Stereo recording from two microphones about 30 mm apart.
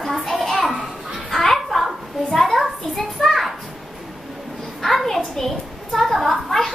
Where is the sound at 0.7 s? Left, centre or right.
Right.